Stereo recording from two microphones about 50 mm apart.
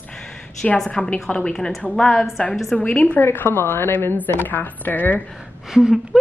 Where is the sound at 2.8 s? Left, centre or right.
Left.